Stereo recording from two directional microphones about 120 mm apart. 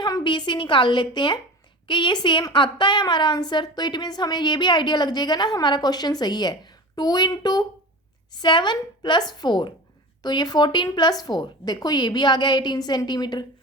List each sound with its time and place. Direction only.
0.0 s a woman's voice: 40° left (ahead or behind)